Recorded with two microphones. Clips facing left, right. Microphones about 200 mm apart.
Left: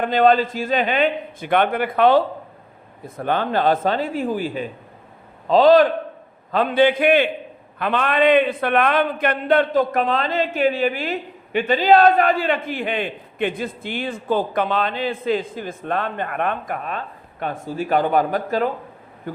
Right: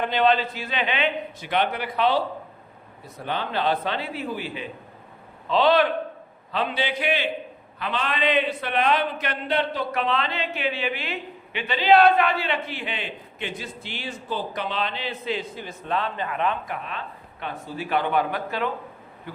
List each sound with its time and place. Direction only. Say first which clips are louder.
0.0 s a man's voice: left 5 dB; 45° left (ahead or behind)